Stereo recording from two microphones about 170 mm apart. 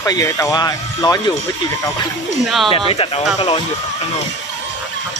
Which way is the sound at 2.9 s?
35° left (ahead or behind).